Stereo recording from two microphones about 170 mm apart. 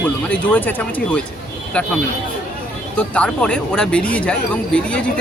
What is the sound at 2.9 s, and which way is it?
Speech, 10° left (ahead or behind).